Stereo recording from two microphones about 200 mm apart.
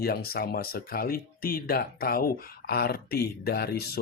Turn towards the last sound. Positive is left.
turn(degrees=50)  # may be behind; listen again after turning